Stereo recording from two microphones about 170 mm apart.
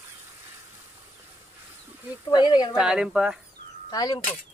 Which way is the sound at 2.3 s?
25° left (ahead or behind).